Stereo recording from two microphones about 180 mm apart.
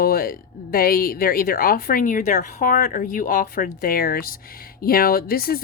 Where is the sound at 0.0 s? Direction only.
55° left (ahead or behind).